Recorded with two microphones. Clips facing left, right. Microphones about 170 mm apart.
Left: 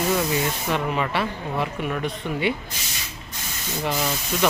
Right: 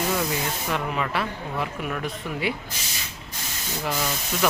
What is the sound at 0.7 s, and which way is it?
Speech, centre (ahead or behind).